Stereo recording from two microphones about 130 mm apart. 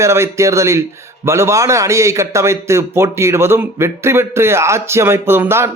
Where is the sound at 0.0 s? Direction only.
20° right (ahead or behind).